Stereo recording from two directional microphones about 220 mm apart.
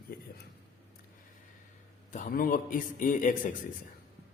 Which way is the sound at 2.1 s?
35° left (ahead or behind).